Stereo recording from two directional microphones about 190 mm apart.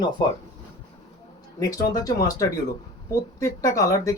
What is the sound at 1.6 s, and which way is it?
Speech, 20° left (ahead or behind).